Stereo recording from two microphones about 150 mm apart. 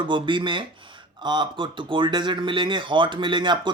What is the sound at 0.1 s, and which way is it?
Speech, 35° right (ahead or behind).